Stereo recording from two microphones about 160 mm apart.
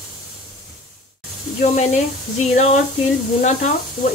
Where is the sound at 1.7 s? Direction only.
50° left (ahead or behind).